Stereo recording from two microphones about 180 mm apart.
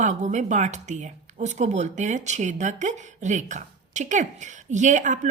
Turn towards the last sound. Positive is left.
turn(degrees=-45)  # may be behind; listen again after turning